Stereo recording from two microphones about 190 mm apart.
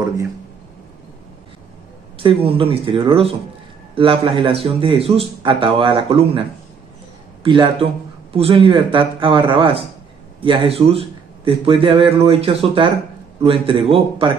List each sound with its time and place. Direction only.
2.1 s a man's voice: 30° right (ahead or behind)
7.4 s a man's voice: 25° right (ahead or behind)